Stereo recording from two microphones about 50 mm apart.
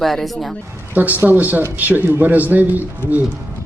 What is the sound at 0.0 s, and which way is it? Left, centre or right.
Speech, centre.